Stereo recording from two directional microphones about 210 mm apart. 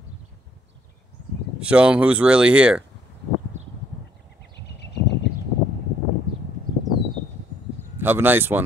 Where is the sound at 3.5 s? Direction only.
35° right (ahead or behind).